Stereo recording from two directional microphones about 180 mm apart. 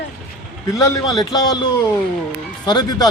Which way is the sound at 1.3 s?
20° left (ahead or behind).